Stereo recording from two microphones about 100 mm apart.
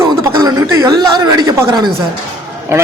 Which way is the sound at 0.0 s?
35° right (ahead or behind).